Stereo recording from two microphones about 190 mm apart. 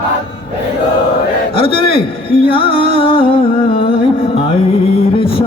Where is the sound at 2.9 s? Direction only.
30° left (ahead or behind).